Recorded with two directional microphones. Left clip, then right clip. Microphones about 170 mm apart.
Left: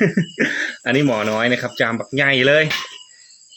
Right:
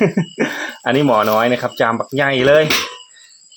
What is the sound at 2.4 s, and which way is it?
Speech, 45° right (ahead or behind).